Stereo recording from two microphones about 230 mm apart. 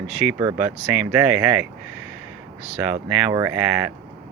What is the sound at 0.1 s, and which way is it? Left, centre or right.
Speech, centre.